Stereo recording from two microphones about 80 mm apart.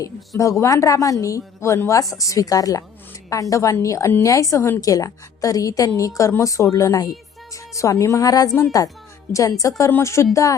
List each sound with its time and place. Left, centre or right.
0.0 s a woman's voice: left